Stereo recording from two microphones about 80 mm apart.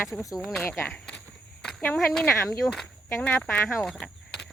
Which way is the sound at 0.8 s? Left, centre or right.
Centre.